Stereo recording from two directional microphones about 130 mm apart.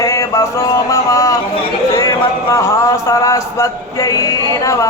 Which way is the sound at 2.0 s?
20° left (ahead or behind).